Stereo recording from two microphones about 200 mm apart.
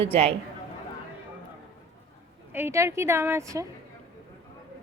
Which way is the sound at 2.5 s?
10° right (ahead or behind).